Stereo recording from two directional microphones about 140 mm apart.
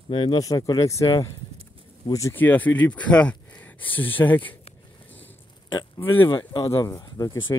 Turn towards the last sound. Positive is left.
turn(degrees=25)  # may be behind; listen again after turning